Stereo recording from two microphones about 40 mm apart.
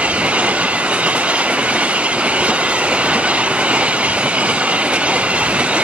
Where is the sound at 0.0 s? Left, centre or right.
Right.